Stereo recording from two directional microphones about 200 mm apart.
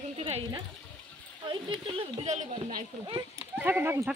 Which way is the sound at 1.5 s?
25° right (ahead or behind).